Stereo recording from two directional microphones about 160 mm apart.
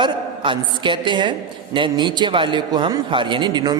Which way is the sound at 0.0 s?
30° right (ahead or behind).